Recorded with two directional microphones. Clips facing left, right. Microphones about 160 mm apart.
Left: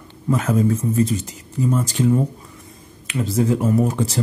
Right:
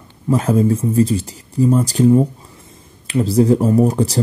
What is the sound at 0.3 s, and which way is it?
Speech, 30° right (ahead or behind).